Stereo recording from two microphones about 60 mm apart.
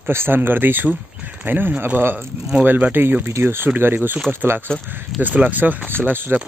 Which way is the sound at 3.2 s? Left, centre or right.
Right.